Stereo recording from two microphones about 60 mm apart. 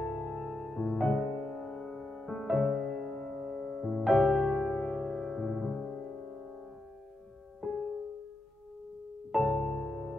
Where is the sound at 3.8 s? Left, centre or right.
Centre.